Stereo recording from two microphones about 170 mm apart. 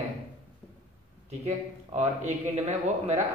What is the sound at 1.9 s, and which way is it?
Speech, 40° right (ahead or behind).